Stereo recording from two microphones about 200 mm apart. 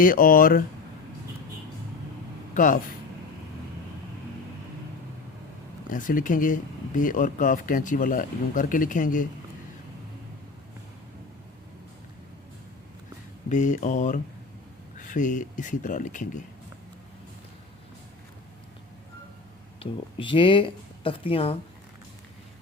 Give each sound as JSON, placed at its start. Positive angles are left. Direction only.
{"t": 0.0, "sound": "speech", "side_deg": 45}
{"t": 5.9, "sound": "speech", "side_deg": 40}
{"t": 13.5, "sound": "speech", "side_deg": 40}
{"t": 19.8, "sound": "speech", "side_deg": 25}